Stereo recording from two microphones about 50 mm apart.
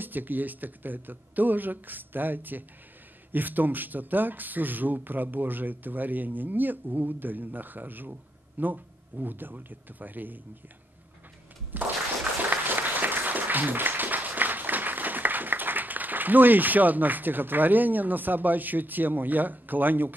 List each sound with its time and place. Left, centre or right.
0.0 s speech: right
11.7 s a sound: right
12.4 s applause: right